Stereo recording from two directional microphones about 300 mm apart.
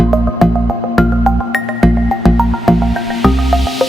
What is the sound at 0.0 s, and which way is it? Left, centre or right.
Music, centre.